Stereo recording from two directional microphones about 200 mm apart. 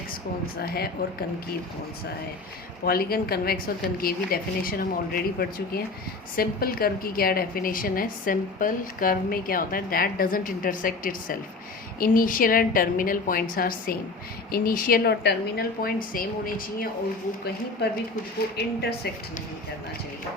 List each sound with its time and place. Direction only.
0.4 s a woman's voice: 50° left (ahead or behind)
2.8 s a woman's voice: 50° left (ahead or behind)
18.5 s a woman's voice: 55° left (ahead or behind)